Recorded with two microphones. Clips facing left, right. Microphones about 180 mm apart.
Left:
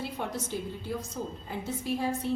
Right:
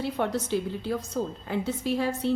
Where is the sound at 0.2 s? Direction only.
75° right (ahead or behind).